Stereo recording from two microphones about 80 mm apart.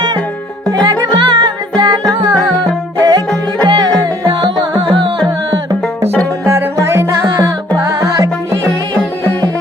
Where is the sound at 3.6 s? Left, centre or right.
Right.